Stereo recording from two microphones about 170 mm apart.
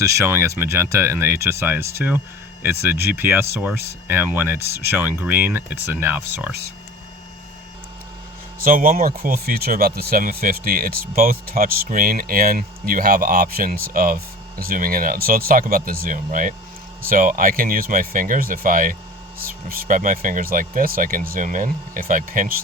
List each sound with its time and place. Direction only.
0.0 s speech: 15° right (ahead or behind)
8.5 s speech: 55° right (ahead or behind)